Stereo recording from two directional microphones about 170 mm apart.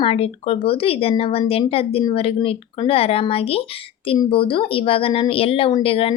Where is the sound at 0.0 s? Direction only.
35° left (ahead or behind).